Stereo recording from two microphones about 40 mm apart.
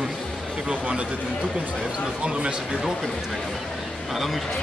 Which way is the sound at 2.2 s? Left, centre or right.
Right.